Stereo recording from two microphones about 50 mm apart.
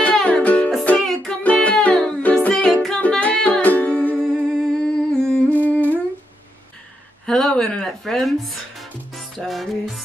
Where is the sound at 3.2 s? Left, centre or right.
Left.